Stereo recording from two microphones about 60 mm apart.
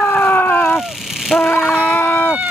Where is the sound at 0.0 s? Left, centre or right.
Left.